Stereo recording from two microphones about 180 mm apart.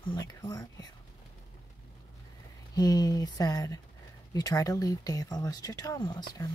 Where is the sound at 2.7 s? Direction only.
20° left (ahead or behind).